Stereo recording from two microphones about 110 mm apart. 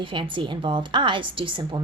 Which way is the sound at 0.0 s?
50° right (ahead or behind).